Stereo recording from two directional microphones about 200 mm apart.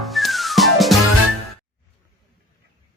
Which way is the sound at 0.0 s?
Centre (ahead or behind).